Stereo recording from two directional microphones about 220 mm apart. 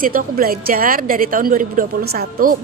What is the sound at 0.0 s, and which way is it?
A woman's voice, 40° right (ahead or behind).